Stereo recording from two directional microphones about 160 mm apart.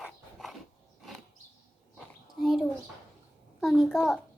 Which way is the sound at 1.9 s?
Centre (ahead or behind).